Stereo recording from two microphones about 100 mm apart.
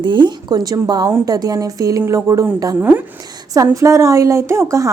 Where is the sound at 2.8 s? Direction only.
20° right (ahead or behind).